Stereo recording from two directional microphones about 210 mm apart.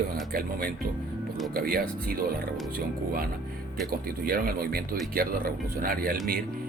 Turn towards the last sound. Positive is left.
turn(degrees=-45)  # may be behind; listen again after turning